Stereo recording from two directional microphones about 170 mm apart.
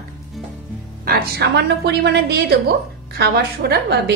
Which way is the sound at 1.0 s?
70° right (ahead or behind).